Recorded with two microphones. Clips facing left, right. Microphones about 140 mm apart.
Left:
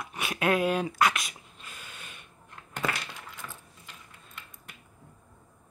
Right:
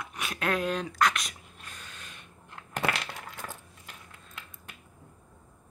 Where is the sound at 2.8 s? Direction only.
75° right (ahead or behind).